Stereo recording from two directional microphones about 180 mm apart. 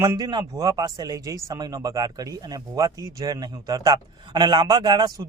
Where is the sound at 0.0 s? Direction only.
20° right (ahead or behind).